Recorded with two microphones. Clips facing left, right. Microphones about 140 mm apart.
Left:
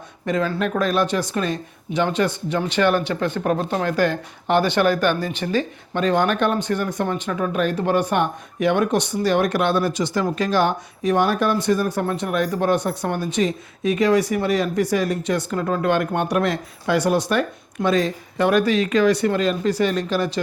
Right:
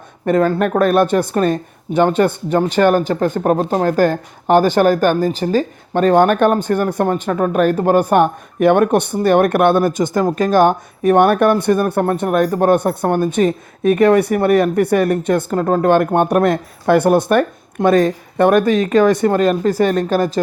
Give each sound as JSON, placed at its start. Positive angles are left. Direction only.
{"t": 0.3, "sound": "speech", "side_deg": -50}